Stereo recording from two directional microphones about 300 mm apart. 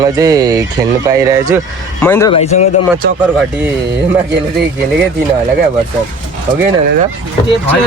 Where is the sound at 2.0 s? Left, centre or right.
Centre.